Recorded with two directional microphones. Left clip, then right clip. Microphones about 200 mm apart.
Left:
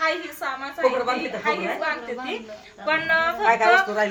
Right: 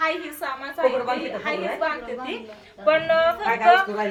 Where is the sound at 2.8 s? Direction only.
Centre (ahead or behind).